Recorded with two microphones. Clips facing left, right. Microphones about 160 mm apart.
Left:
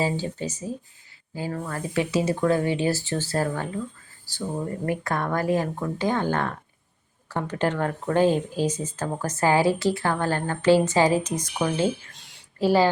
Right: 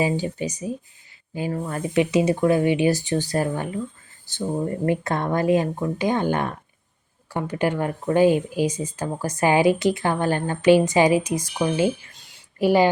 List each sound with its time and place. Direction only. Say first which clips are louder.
0.0 s speech: right 3 dB; 15° right (ahead or behind)
12.1 s a sound: left 1 dB; centre (ahead or behind)
12.5 s speech: right 2 dB; 15° right (ahead or behind)